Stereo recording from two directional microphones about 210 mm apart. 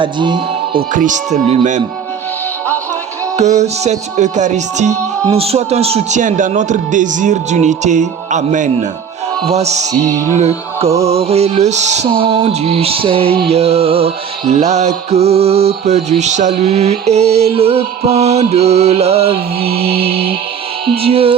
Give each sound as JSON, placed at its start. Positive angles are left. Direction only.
{"t": 0.0, "sound": "music", "side_deg": -20}
{"t": 0.9, "sound": "speech", "side_deg": -35}
{"t": 3.3, "sound": "speech", "side_deg": -35}
{"t": 11.0, "sound": "music", "side_deg": -30}
{"t": 19.5, "sound": "music", "side_deg": -45}
{"t": 21.0, "sound": "music", "side_deg": -25}